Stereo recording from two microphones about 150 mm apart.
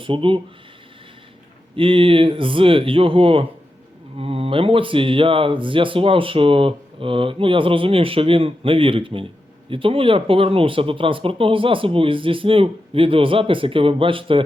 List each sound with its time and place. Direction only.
0.0 s speech: 35° right (ahead or behind)
1.7 s speech: 35° right (ahead or behind)